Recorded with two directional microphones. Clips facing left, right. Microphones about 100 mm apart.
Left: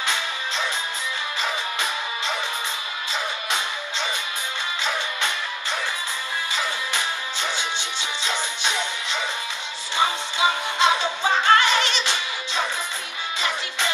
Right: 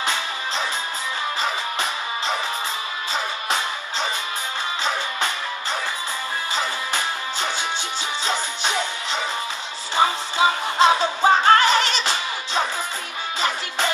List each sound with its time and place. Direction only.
4.8 s music: 35° right (ahead or behind)